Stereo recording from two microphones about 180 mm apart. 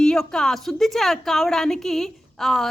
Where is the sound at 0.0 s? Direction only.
5° left (ahead or behind).